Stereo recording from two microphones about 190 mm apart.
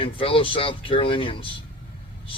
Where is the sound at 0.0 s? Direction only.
30° left (ahead or behind).